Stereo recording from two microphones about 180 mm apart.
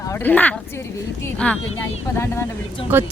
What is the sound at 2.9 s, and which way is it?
Speech, 10° right (ahead or behind).